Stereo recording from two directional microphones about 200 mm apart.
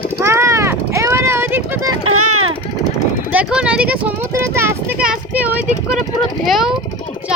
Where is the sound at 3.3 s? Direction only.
5° right (ahead or behind).